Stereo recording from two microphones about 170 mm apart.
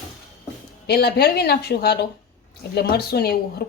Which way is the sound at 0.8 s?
70° left (ahead or behind).